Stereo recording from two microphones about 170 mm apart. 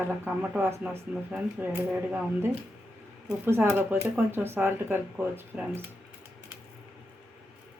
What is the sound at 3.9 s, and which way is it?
Speech, 10° right (ahead or behind).